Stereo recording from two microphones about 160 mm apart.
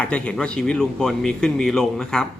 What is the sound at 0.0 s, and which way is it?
Speech, 5° left (ahead or behind).